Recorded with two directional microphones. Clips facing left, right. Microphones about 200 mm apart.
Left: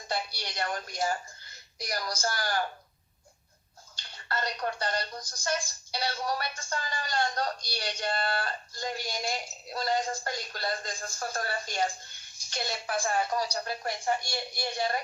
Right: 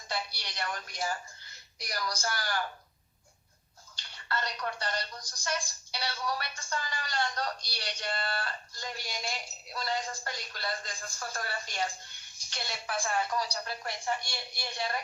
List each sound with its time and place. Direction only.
0.1 s speech: 45° left (ahead or behind)
4.3 s speech: 45° left (ahead or behind)